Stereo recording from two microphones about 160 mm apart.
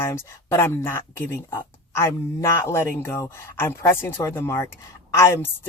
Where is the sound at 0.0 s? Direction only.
15° left (ahead or behind).